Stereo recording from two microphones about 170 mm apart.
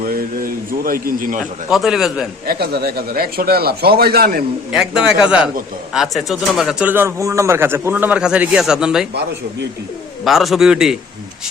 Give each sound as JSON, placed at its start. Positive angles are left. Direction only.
{"t": 0.0, "sound": "speech", "side_deg": -55}
{"t": 1.7, "sound": "speech", "side_deg": 0}
{"t": 2.5, "sound": "speech", "side_deg": -65}
{"t": 4.7, "sound": "speech", "side_deg": -5}
{"t": 10.2, "sound": "speech", "side_deg": 0}